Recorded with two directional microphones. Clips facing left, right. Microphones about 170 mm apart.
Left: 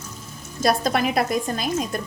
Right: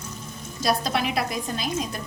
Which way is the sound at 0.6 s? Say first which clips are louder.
Left 4 dB; 50° left (ahead or behind).